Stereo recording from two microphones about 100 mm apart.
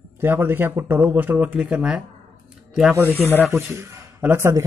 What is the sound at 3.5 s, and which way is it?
Speech, 20° right (ahead or behind).